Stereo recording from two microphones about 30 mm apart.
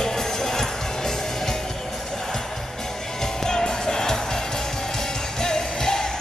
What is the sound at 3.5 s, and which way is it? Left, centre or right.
Music, left.